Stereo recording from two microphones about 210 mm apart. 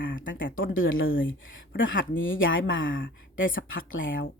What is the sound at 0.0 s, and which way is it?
Speech, 65° left (ahead or behind).